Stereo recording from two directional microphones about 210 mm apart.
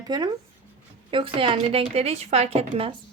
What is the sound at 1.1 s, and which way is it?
A woman's voice, 25° right (ahead or behind).